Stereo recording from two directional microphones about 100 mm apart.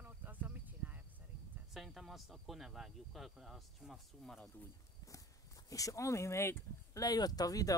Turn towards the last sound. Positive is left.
turn(degrees=35)  # may be behind; listen again after turning